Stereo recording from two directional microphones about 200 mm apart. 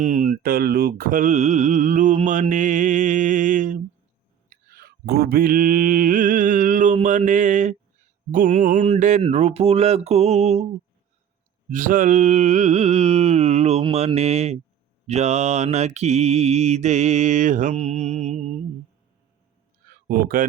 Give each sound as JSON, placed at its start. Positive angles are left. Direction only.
{"t": 0.0, "sound": "mantra", "side_deg": -40}
{"t": 11.7, "sound": "mantra", "side_deg": -40}
{"t": 20.1, "sound": "speech", "side_deg": -45}